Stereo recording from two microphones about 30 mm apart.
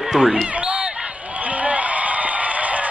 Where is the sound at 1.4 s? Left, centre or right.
Right.